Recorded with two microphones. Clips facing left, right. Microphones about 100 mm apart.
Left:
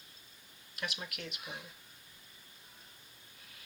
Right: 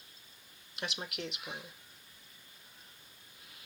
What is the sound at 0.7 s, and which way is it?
Speech, 30° right (ahead or behind).